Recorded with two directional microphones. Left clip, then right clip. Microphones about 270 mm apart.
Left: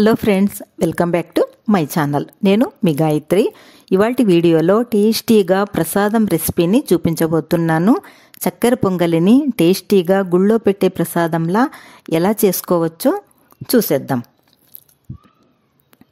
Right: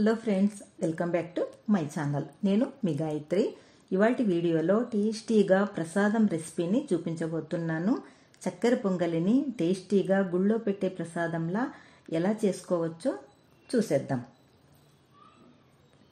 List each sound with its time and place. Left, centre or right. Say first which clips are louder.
0.0 s a woman's voice: left 13 dB; left